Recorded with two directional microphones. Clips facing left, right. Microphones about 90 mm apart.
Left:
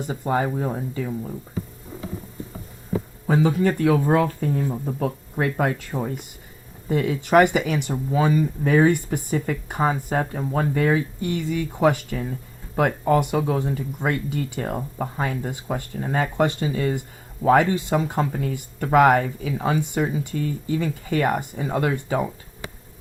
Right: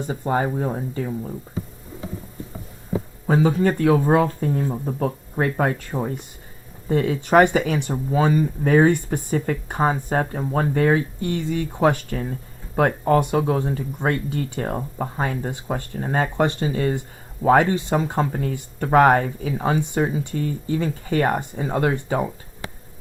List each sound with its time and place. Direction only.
0.1 s speech: 30° right (ahead or behind)
3.2 s speech: 35° right (ahead or behind)
5.9 s speech: 15° right (ahead or behind)
6.9 s speech: 35° right (ahead or behind)
20.3 s speech: 40° right (ahead or behind)